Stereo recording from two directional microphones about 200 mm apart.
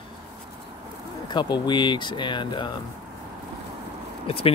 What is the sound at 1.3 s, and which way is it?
Speech, 20° left (ahead or behind).